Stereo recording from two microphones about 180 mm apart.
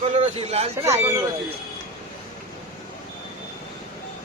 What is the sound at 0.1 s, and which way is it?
Speech, 35° right (ahead or behind).